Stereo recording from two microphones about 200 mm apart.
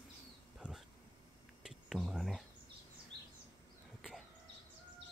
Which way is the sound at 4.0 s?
Centre (ahead or behind).